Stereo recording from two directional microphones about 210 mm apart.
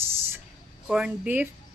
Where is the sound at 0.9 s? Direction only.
5° right (ahead or behind).